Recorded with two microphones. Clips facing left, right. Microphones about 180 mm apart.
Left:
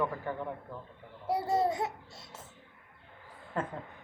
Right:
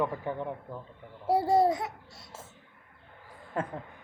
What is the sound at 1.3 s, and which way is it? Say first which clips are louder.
Speech: right 5 dB; 30° right (ahead or behind).